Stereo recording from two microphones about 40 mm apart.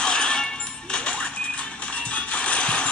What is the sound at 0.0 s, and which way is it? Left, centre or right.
Music, left.